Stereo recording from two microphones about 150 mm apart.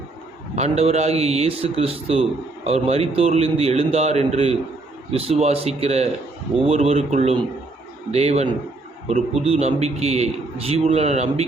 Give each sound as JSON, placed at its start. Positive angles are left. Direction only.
{"t": 0.5, "sound": "a man's voice", "side_deg": -45}